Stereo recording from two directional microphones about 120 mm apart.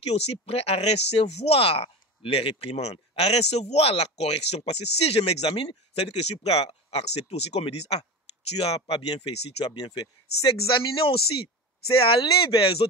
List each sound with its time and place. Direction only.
0.0 s speech: 60° left (ahead or behind)
5.5 s speech: 45° left (ahead or behind)
6.1 s speech: 60° left (ahead or behind)